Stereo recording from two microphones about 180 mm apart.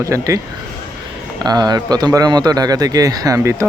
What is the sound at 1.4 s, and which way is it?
Speech, 20° right (ahead or behind).